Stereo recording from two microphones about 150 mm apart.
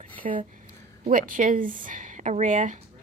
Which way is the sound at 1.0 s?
60° right (ahead or behind).